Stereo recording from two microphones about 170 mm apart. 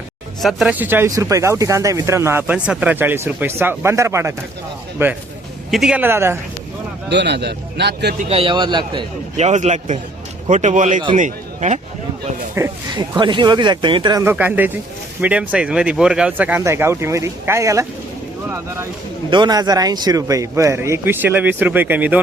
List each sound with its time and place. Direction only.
0.4 s speech: 5° right (ahead or behind)
7.1 s a man's voice: 85° right
8.3 s speech: 30° right (ahead or behind)
9.4 s a man's voice: 45° right (ahead or behind)
12.5 s speech: 15° right (ahead or behind)
13.1 s speech: 25° right (ahead or behind)
19.3 s speech: 25° right (ahead or behind); by 22.2 s 10° right (ahead or behind)